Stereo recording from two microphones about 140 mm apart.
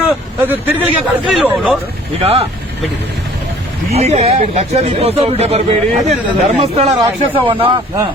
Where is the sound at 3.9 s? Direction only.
50° right (ahead or behind).